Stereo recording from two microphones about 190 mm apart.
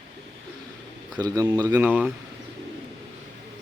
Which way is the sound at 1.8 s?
5° right (ahead or behind).